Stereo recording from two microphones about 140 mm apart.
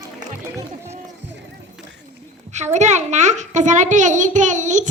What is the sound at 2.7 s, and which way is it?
A child's voice, 55° right (ahead or behind).